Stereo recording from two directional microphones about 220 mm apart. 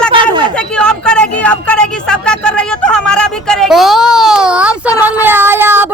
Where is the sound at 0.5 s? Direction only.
5° left (ahead or behind).